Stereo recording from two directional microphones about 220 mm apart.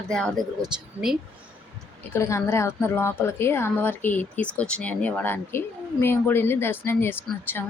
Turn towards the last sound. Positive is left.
turn(degrees=10)  # may be behind; listen again after turning